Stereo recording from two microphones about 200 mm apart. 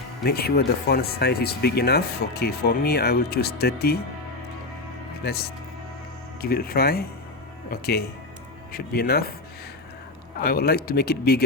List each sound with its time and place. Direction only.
0.3 s speech: 50° left (ahead or behind)
6.4 s speech: 50° left (ahead or behind)
10.4 s speech: 50° left (ahead or behind)